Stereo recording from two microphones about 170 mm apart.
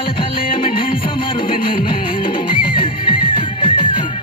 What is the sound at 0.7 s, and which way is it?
Music, 55° left (ahead or behind).